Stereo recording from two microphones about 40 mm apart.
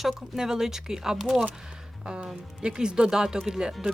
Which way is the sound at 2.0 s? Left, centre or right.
Right.